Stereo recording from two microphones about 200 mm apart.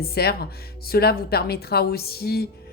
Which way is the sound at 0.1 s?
50° left (ahead or behind).